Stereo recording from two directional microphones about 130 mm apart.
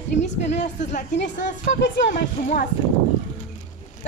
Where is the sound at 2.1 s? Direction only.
80° left.